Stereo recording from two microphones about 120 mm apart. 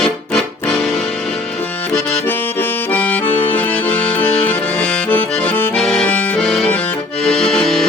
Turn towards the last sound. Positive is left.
turn(degrees=0)  # may be behind; listen again after turning